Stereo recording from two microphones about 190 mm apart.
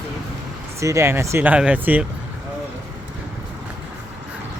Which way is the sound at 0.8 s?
15° right (ahead or behind).